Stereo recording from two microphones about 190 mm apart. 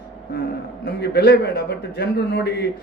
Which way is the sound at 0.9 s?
60° left (ahead or behind).